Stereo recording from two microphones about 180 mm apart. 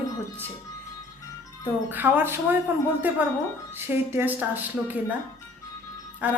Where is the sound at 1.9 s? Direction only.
10° right (ahead or behind).